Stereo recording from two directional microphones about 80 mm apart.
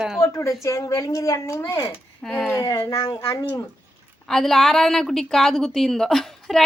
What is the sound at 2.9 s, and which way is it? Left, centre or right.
Speech, left.